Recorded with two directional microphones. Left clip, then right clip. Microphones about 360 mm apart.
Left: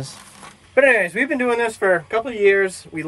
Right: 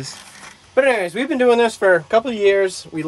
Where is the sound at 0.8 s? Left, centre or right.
Centre.